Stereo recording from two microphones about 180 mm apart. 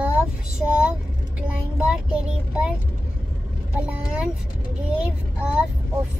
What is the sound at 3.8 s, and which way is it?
A child's voice, 5° right (ahead or behind).